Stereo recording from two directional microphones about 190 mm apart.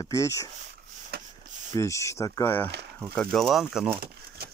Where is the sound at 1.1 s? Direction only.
55° right (ahead or behind).